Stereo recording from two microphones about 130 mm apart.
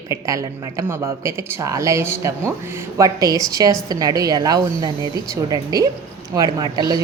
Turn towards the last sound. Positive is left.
turn(degrees=-30)  # may be behind; listen again after turning